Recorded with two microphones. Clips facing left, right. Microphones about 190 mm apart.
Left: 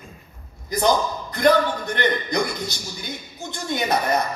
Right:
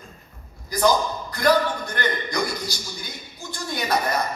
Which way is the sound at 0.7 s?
20° left (ahead or behind).